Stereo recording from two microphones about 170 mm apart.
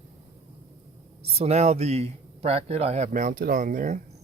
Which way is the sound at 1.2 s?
40° right (ahead or behind).